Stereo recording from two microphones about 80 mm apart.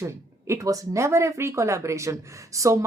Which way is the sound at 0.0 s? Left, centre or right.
Right.